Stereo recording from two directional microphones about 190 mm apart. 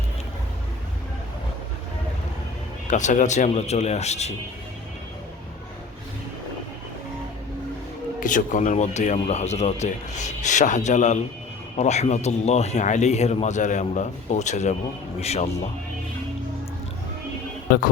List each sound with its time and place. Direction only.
2.8 s speech: 40° left (ahead or behind)
8.2 s speech: 45° left (ahead or behind)